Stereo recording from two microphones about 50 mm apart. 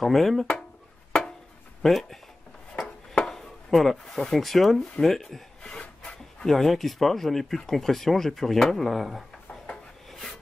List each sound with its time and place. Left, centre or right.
0.0 s speech: centre
1.8 s speech: centre
3.3 s chopping: centre
4.1 s speech: centre
5.6 s rub: centre
6.4 s speech: centre